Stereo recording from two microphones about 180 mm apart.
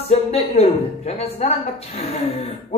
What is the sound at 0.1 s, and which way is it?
Speech, 35° left (ahead or behind).